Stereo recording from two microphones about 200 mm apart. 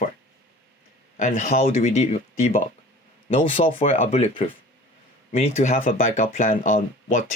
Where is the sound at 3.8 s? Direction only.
30° left (ahead or behind).